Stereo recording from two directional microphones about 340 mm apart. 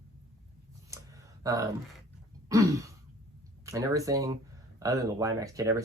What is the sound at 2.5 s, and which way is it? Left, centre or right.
Speech, centre.